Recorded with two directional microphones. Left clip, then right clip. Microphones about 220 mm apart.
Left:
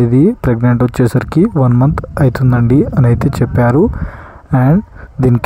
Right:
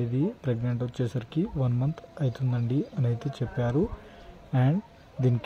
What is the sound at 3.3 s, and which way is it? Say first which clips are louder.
Speech: left 18 dB; 35° left (ahead or behind).